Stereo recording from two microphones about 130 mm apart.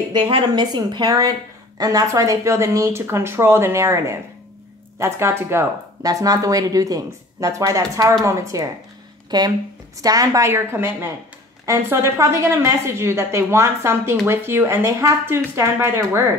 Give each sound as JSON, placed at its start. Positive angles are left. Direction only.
{"t": 0.1, "sound": "a woman's voice", "side_deg": -40}